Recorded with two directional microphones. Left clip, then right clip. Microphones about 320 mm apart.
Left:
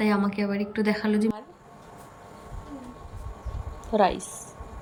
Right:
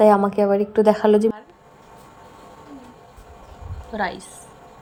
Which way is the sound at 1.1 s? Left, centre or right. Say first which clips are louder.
Right 10 dB; centre.